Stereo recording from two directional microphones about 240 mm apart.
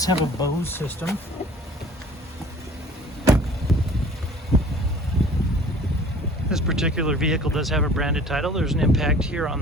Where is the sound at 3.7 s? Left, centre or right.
Centre.